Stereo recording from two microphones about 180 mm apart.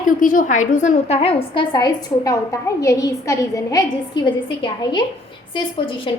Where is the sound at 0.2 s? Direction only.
50° left (ahead or behind); by 5.0 s 25° left (ahead or behind).